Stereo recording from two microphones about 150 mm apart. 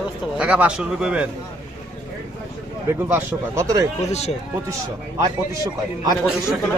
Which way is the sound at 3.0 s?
15° right (ahead or behind).